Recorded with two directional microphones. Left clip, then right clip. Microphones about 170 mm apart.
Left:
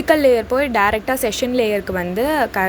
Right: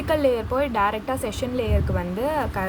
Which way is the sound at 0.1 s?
20° left (ahead or behind).